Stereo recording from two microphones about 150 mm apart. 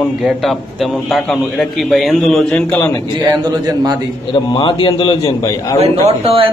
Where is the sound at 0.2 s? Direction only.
Centre (ahead or behind).